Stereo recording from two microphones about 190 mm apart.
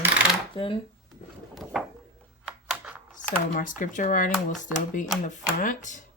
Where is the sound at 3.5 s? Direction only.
45° left (ahead or behind).